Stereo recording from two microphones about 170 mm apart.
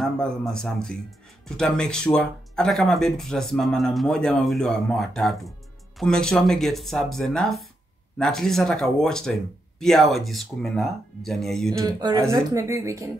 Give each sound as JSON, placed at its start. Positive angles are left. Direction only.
{"t": 0.0, "sound": "speech", "side_deg": 5}
{"t": 11.8, "sound": "speech", "side_deg": -25}